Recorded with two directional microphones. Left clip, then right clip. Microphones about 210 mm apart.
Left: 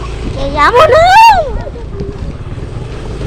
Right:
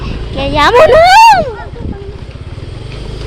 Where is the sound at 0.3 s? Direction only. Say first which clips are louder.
Right 1 dB; 35° right (ahead or behind).